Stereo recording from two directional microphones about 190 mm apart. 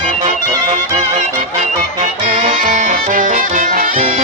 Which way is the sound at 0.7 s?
35° right (ahead or behind).